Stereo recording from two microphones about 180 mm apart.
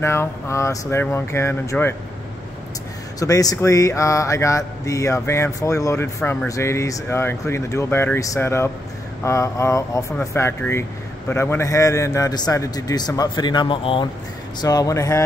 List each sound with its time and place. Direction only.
0.0 s speech: 15° left (ahead or behind)
3.2 s speech: 20° left (ahead or behind)